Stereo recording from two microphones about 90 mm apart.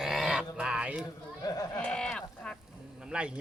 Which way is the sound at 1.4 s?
40° left (ahead or behind).